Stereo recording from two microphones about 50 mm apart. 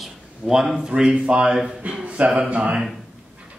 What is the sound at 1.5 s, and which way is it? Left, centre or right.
Speech, centre.